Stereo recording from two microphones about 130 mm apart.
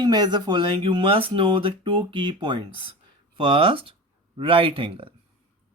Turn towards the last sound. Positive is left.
turn(degrees=-40)  # may be behind; listen again after turning